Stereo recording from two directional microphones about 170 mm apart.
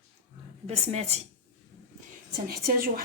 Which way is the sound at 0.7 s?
40° right (ahead or behind).